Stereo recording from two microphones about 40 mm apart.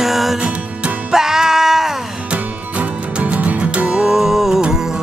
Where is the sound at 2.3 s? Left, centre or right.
Right.